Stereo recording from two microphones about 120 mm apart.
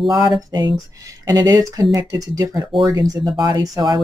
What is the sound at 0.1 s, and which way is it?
Speech, 35° right (ahead or behind).